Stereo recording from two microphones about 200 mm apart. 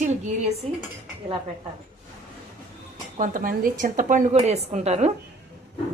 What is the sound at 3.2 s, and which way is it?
A woman's voice, 45° right (ahead or behind).